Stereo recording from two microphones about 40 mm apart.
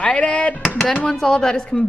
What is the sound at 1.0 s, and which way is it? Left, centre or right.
Speech, centre.